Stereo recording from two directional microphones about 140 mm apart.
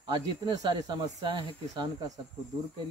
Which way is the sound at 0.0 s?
30° right (ahead or behind).